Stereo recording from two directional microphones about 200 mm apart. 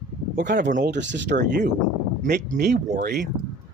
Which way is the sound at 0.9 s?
60° right (ahead or behind).